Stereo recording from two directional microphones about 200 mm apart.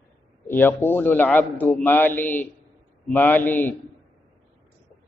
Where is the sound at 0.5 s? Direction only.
10° left (ahead or behind).